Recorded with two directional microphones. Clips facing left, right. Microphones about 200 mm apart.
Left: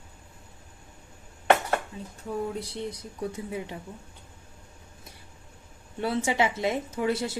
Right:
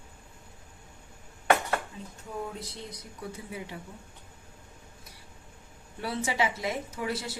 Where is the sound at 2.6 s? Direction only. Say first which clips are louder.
Left 7 dB; 30° left (ahead or behind).